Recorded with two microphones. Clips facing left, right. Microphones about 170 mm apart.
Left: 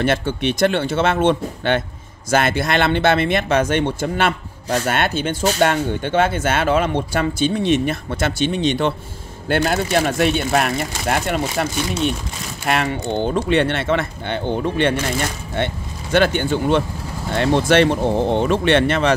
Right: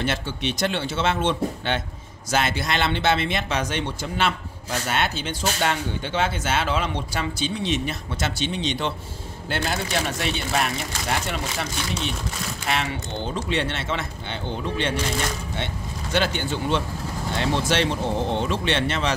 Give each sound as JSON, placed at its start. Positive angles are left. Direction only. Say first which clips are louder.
{"t": 0.0, "sound": "speech", "louder": "left 7 dB", "side_deg": 55}